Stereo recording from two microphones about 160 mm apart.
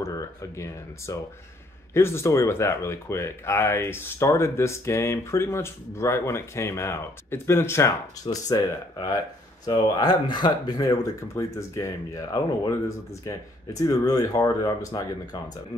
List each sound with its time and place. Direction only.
0.0 s speech: 20° left (ahead or behind)